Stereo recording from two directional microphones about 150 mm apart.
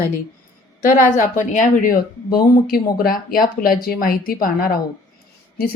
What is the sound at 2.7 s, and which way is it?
Speech, 75° left (ahead or behind).